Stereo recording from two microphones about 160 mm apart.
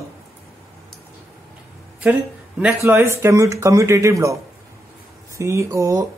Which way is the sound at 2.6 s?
15° right (ahead or behind).